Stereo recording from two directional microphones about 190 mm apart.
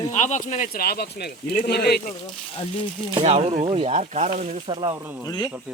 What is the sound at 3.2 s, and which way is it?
Speech, 35° right (ahead or behind).